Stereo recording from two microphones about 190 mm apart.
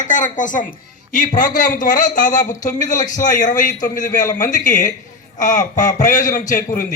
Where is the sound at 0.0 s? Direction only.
40° left (ahead or behind).